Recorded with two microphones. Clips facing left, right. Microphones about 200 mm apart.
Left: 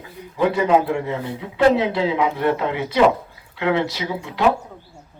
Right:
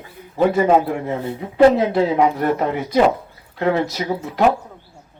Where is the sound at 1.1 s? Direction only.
45° right (ahead or behind).